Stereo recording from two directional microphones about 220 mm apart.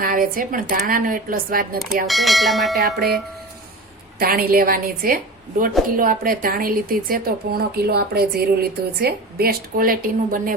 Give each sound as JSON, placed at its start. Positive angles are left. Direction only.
{"t": 0.0, "sound": "a woman's voice", "side_deg": -40}
{"t": 2.0, "sound": "bell", "side_deg": 0}
{"t": 4.2, "sound": "a woman's voice", "side_deg": -40}